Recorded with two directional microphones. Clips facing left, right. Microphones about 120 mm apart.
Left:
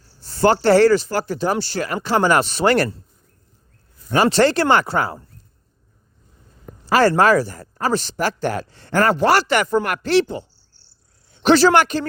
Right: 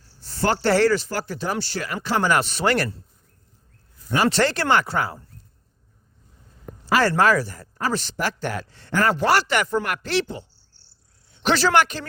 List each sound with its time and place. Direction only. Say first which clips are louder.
0.4 s speech: left 6 dB; 35° left (ahead or behind)
4.1 s speech: left 5 dB; 30° left (ahead or behind)
7.0 s speech: left 5 dB; 35° left (ahead or behind)
11.4 s speech: left 5 dB; 30° left (ahead or behind)